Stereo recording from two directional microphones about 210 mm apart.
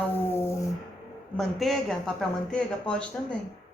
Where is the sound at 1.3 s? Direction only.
Centre (ahead or behind).